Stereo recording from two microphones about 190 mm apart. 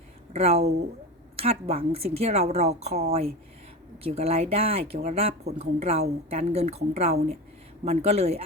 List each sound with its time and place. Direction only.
0.3 s a woman's voice: 35° right (ahead or behind)